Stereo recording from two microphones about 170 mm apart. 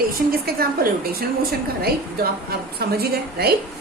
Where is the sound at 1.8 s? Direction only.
65° right (ahead or behind).